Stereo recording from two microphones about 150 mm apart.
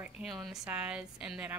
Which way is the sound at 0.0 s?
Centre (ahead or behind).